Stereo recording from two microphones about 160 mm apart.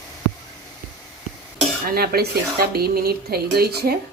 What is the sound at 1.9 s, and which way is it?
Speech, 70° right (ahead or behind).